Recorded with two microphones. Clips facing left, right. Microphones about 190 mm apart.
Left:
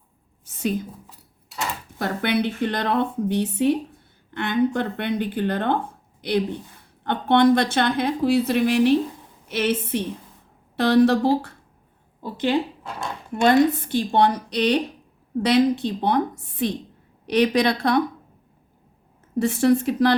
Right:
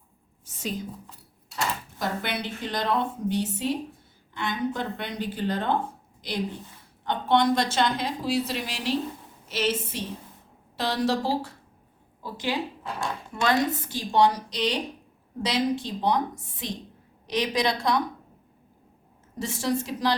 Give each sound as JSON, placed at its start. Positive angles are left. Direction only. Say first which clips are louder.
{"t": 0.4, "sound": "a woman's voice", "louder": "left 7 dB", "side_deg": 60}
{"t": 2.0, "sound": "a woman's voice", "louder": "left 8 dB", "side_deg": 60}
{"t": 13.4, "sound": "a woman's voice", "louder": "left 8 dB", "side_deg": 60}
{"t": 19.4, "sound": "a woman's voice", "louder": "left 9 dB", "side_deg": 60}